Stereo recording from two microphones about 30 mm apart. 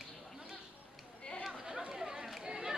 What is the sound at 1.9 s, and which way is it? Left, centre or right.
Chatter, centre.